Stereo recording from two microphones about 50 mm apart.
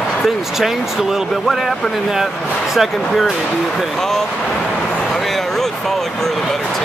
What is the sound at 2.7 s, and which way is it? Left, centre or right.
Speech, centre.